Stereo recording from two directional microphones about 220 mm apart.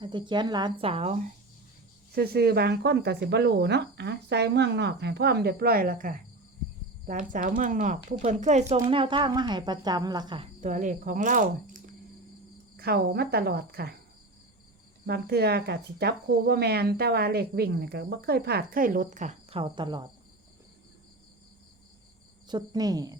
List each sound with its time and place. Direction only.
0.0 s a woman's voice: 20° right (ahead or behind)
2.1 s a woman's voice: 45° right (ahead or behind)
15.0 s speech: 50° right (ahead or behind); by 20.1 s 20° right (ahead or behind)
22.4 s a woman's voice: 20° right (ahead or behind)